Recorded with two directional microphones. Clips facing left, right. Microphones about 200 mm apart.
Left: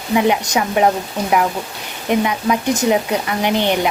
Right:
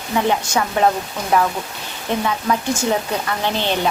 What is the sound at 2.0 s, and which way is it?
Speech, 15° left (ahead or behind).